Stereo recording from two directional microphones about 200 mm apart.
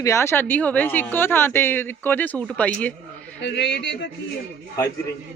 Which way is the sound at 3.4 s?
65° left (ahead or behind).